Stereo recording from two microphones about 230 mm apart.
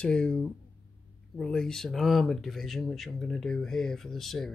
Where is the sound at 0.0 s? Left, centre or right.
Centre.